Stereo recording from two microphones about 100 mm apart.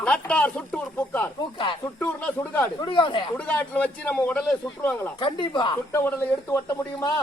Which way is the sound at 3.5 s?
15° left (ahead or behind).